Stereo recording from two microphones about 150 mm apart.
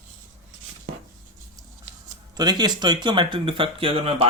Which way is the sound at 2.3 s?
25° right (ahead or behind).